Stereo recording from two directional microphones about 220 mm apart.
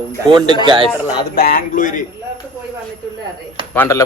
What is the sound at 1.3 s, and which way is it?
Speech, 40° left (ahead or behind).